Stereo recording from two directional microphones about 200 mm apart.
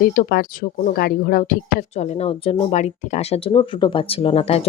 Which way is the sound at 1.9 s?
35° left (ahead or behind).